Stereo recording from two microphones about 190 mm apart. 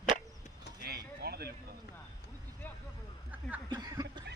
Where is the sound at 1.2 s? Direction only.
55° right (ahead or behind).